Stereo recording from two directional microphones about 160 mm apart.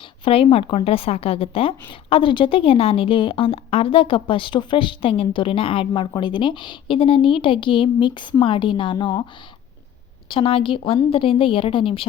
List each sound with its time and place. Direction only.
0.3 s a woman's voice: 35° left (ahead or behind)
10.2 s a woman's voice: 35° left (ahead or behind)